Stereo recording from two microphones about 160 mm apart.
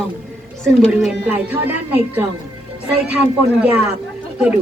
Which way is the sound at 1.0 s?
5° right (ahead or behind).